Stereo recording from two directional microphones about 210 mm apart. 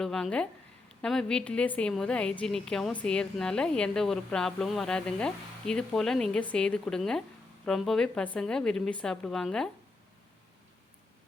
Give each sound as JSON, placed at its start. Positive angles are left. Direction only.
{"t": 0.0, "sound": "a woman's voice", "side_deg": 0}